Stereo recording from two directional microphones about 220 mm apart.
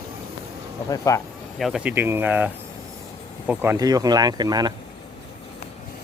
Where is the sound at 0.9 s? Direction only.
15° left (ahead or behind).